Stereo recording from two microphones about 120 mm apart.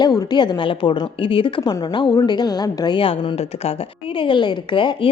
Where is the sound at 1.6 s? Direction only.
30° left (ahead or behind).